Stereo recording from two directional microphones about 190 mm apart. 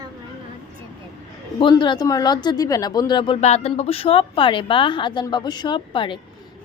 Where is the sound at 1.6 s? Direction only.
25° left (ahead or behind).